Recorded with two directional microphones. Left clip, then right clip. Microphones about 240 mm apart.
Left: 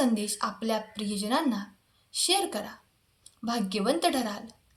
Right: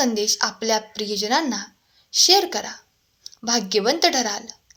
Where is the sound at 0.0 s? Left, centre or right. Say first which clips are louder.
Right 8 dB; right.